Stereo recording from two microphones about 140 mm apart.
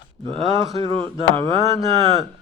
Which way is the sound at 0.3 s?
50° right (ahead or behind).